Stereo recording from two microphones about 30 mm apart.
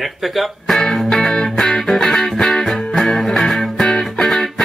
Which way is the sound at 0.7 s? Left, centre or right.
Centre.